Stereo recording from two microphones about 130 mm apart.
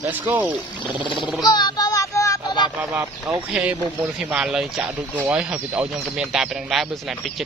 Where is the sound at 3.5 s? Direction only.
10° right (ahead or behind).